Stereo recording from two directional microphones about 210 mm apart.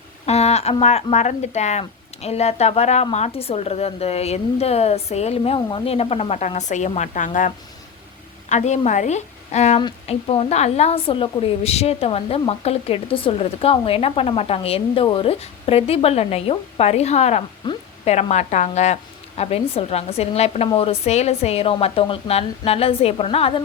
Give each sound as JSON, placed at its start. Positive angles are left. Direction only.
{"t": 0.3, "sound": "a woman's voice", "side_deg": 30}